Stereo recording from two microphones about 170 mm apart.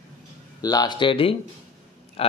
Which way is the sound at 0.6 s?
25° left (ahead or behind).